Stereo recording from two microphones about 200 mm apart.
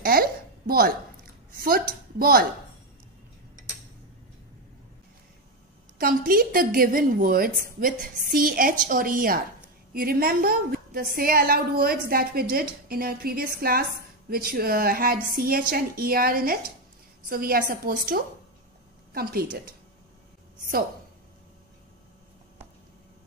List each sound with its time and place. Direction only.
0.0 s a sound: 50° right (ahead or behind)
1.6 s a woman's voice: 50° right (ahead or behind)
5.9 s a woman's voice: 45° right (ahead or behind)